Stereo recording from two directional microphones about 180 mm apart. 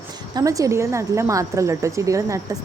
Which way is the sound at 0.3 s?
20° right (ahead or behind).